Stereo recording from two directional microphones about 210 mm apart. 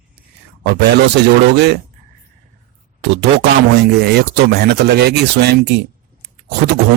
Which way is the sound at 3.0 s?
55° right (ahead or behind).